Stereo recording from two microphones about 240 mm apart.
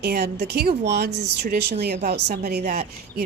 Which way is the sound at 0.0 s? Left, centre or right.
Right.